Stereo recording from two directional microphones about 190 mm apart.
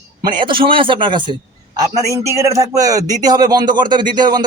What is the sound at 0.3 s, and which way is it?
A man's voice, 25° right (ahead or behind).